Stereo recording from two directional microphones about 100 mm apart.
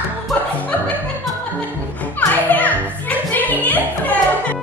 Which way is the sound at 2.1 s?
15° left (ahead or behind).